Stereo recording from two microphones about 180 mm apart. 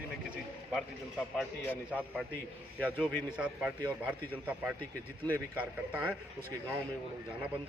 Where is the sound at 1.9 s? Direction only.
5° right (ahead or behind).